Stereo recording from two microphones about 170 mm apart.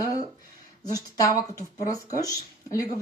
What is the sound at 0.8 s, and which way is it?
Speech, 20° left (ahead or behind).